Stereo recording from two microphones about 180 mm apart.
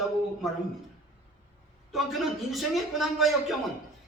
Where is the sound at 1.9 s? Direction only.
Centre (ahead or behind).